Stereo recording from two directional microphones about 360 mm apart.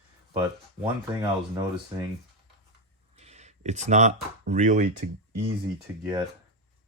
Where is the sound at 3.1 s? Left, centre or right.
Centre.